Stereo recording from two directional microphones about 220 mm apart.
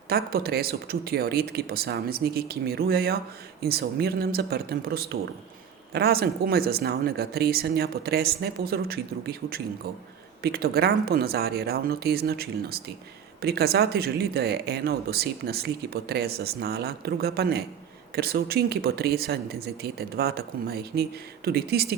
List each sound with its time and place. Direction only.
0.1 s speech: 45° right (ahead or behind)